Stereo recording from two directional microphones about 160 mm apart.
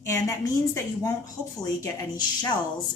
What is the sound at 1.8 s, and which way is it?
Speech, 20° left (ahead or behind).